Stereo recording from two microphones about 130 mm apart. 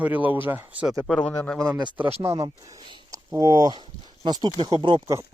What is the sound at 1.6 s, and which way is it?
Speech, 30° right (ahead or behind).